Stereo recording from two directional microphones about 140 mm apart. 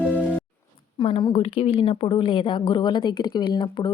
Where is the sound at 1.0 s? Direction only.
35° left (ahead or behind).